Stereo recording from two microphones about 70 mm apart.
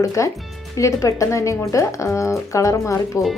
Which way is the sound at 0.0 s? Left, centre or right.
Left.